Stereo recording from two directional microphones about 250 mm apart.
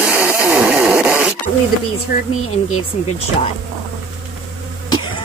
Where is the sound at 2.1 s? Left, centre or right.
Left.